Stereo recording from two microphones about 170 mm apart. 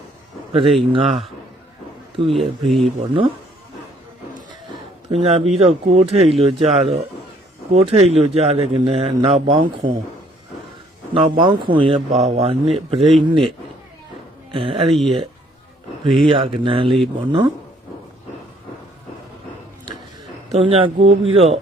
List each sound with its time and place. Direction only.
0.5 s speech: 30° right (ahead or behind)
2.3 s speech: centre (ahead or behind)
2.8 s speech: 30° right (ahead or behind)
5.1 s speech: 35° right (ahead or behind)
9.5 s speech: 55° right (ahead or behind)
11.1 s speech: 30° right (ahead or behind)
14.5 s speech: 30° right (ahead or behind)
16.3 s speech: 30° right (ahead or behind)
20.5 s speech: 35° right (ahead or behind)